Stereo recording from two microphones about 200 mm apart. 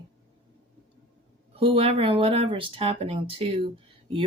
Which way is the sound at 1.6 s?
25° right (ahead or behind).